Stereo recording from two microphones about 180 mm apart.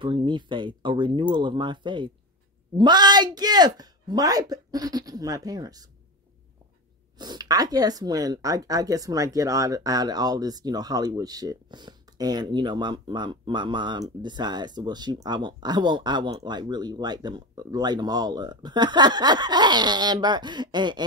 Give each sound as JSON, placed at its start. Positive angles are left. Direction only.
{"t": 0.0, "sound": "speech", "side_deg": -25}
{"t": 7.2, "sound": "speech", "side_deg": -20}